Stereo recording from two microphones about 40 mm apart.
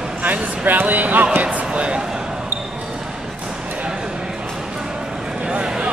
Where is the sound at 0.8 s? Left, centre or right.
Right.